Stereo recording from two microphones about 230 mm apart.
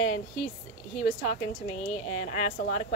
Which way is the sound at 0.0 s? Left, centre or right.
Left.